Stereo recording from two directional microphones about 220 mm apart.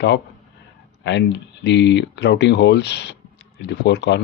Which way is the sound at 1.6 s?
50° left (ahead or behind).